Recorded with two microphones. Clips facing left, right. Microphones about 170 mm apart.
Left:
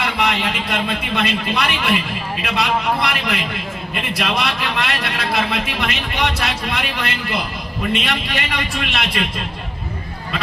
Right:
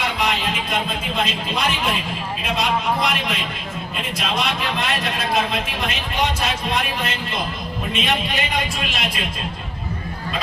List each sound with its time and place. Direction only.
0.0 s a man's voice: 65° left (ahead or behind)